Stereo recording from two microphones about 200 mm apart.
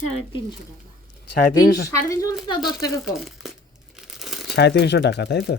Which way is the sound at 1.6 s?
50° left (ahead or behind).